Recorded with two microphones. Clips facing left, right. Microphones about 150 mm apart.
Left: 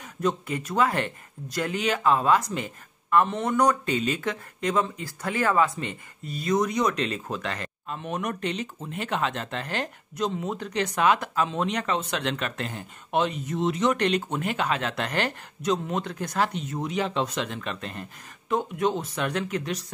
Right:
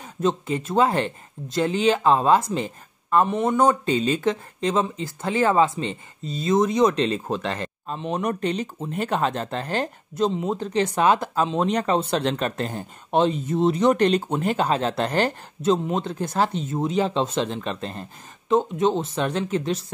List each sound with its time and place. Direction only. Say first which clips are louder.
0.0 s speech: right 3 dB; 25° right (ahead or behind)
3.3 s speech: right 4 dB; 20° right (ahead or behind)